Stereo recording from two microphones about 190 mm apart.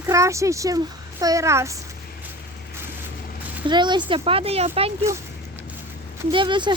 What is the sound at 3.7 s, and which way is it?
Speech, 25° right (ahead or behind).